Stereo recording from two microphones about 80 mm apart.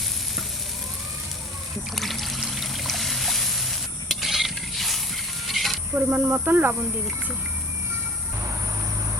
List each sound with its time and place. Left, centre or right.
2.0 s trickle: centre
5.9 s speech: right